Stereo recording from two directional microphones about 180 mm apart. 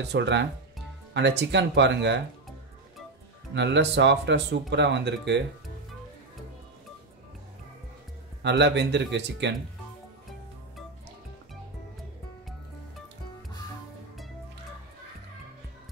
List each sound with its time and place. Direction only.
0.1 s speech: 75° right (ahead or behind)
3.5 s speech: 75° right (ahead or behind)
8.4 s speech: 75° right (ahead or behind)